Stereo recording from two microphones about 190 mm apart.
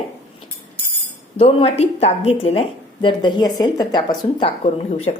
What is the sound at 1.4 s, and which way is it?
A woman's voice, 30° left (ahead or behind).